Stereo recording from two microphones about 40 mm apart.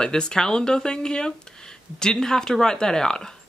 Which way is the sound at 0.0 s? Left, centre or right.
Centre.